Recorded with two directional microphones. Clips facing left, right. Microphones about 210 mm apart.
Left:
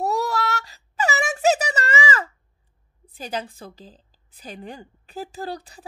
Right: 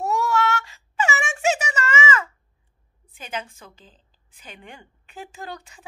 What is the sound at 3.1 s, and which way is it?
A woman's voice, 35° left (ahead or behind).